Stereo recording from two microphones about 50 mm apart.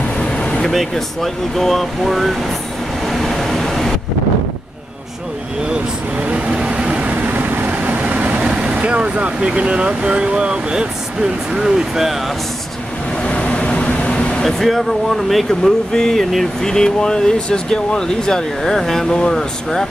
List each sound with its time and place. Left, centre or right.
0.2 s vehicle: centre
0.7 s speech: centre
3.1 s a sound: centre
6.2 s vehicle: right
7.2 s vehicle: right
8.4 s speech: centre
13.2 s vehicle: left
14.4 s speech: centre